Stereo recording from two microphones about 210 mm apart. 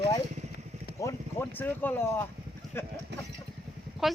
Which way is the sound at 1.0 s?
10° left (ahead or behind).